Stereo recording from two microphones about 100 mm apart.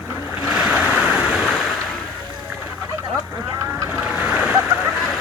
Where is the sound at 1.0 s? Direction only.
5° right (ahead or behind).